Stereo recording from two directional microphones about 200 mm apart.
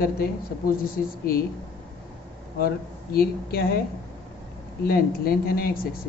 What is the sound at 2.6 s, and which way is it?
A woman's voice, 50° left (ahead or behind).